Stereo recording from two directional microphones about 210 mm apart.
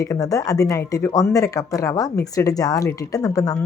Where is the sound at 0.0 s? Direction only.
15° left (ahead or behind).